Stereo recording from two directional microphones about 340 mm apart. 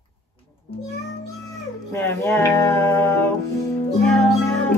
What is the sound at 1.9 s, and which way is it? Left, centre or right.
Music, centre.